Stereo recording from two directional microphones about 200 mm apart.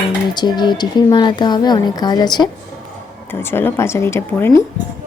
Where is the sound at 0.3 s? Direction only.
20° left (ahead or behind).